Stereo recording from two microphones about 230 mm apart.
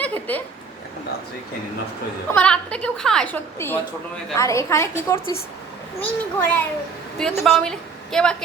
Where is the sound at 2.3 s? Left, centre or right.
Centre.